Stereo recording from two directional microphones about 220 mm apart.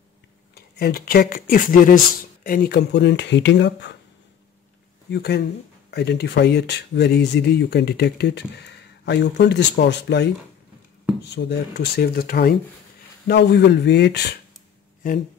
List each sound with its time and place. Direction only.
0.6 s speech: 45° left (ahead or behind)
5.1 s speech: 50° left (ahead or behind)
11.3 s speech: 50° left (ahead or behind)